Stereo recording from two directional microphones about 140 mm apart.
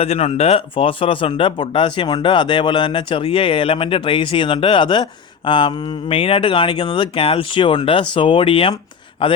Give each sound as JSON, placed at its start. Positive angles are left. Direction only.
{"t": 0.0, "sound": "speech", "side_deg": 45}